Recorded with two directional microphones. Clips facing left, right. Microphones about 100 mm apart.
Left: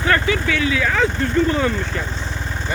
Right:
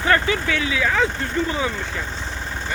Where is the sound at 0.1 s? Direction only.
25° right (ahead or behind); by 1.7 s 10° right (ahead or behind).